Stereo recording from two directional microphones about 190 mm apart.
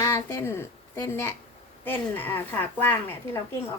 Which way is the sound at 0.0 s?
15° left (ahead or behind).